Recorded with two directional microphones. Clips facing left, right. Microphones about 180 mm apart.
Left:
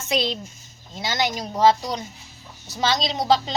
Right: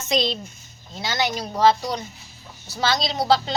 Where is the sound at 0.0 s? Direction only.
10° left (ahead or behind).